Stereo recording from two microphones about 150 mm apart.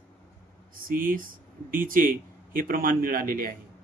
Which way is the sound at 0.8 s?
70° right (ahead or behind).